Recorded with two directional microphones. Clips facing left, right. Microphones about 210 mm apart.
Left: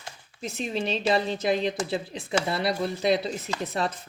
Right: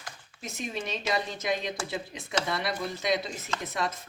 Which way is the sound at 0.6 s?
30° left (ahead or behind).